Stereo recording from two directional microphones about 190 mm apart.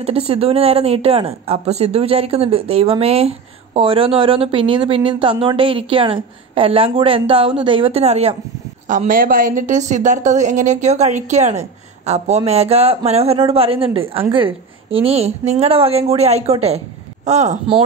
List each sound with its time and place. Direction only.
0.0 s a woman's voice: 30° right (ahead or behind)